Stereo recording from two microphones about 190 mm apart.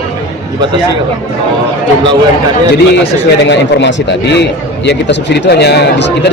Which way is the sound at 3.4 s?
65° left (ahead or behind).